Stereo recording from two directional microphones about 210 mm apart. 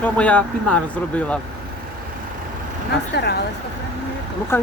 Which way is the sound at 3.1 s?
50° left (ahead or behind).